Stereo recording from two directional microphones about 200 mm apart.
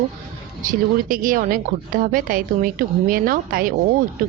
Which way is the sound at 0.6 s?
40° right (ahead or behind).